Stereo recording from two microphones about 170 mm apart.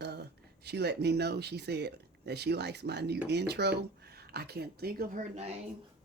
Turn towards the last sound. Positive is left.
turn(degrees=-40)  # may be behind; listen again after turning